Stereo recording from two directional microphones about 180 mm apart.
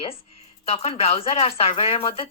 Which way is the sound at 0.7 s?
35° left (ahead or behind).